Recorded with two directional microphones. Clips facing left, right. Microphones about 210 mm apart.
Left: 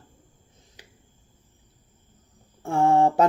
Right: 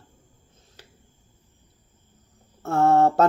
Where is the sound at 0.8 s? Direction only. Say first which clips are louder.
Right 1 dB; 15° left (ahead or behind).